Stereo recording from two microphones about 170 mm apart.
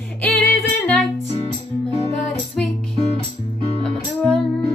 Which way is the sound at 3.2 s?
35° left (ahead or behind).